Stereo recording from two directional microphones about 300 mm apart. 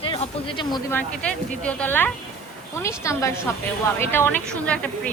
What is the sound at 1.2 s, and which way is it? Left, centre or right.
A woman's voice, centre.